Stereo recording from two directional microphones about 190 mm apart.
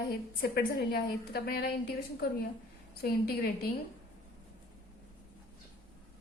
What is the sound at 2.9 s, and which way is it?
Speech, 55° left (ahead or behind).